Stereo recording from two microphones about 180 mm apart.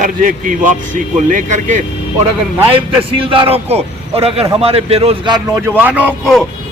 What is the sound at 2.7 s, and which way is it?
A man's voice, 30° right (ahead or behind).